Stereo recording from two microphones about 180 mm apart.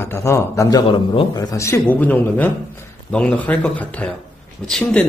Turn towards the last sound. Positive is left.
turn(degrees=5)  # may be behind; listen again after turning